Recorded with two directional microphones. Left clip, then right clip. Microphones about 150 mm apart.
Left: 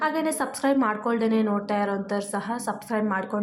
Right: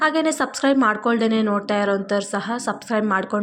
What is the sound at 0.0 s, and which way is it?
A woman's voice, 20° right (ahead or behind).